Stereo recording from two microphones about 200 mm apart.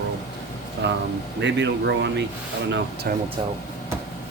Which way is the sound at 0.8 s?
60° right (ahead or behind).